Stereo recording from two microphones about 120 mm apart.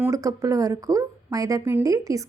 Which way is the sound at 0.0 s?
30° right (ahead or behind).